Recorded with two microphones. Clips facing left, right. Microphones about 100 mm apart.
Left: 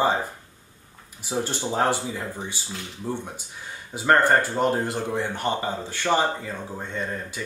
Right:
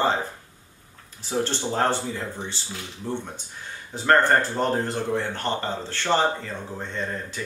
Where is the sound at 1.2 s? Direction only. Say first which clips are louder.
Right 1 dB; 10° left (ahead or behind).